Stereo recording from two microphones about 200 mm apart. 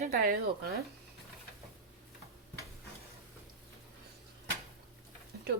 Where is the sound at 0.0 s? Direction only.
45° right (ahead or behind).